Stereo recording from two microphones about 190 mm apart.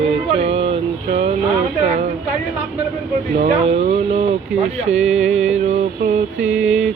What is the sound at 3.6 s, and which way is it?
Music, 35° right (ahead or behind).